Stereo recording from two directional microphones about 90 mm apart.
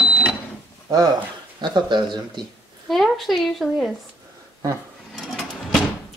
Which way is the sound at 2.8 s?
Centre (ahead or behind).